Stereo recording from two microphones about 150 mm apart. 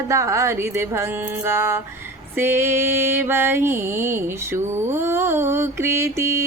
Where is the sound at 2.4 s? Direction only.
15° right (ahead or behind).